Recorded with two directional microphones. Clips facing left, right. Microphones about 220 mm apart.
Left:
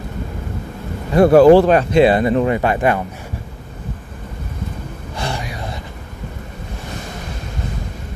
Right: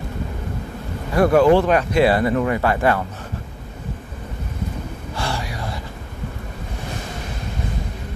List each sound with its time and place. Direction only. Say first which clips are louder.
1.1 s speech: left 6 dB; 30° left (ahead or behind)
5.1 s gasp: left 1 dB; 20° left (ahead or behind)